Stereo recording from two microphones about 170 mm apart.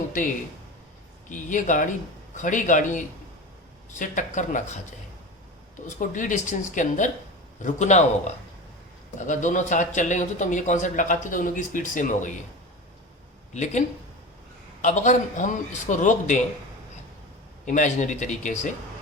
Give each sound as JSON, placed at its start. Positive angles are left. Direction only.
{"t": 1.3, "sound": "speech", "side_deg": 50}
{"t": 5.8, "sound": "speech", "side_deg": 50}
{"t": 9.1, "sound": "speech", "side_deg": 45}
{"t": 13.5, "sound": "speech", "side_deg": 45}
{"t": 17.7, "sound": "speech", "side_deg": 45}